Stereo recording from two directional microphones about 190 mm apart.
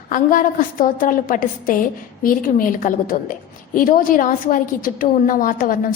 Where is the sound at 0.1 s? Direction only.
45° left (ahead or behind).